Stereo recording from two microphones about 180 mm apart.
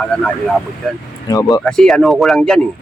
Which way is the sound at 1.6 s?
5° left (ahead or behind).